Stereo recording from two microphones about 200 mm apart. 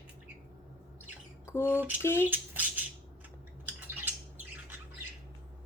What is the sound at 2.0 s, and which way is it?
Speech, 10° left (ahead or behind).